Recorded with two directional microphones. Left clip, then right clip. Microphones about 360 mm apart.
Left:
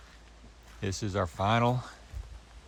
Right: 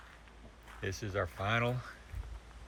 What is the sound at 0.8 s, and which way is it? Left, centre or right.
Speech, centre.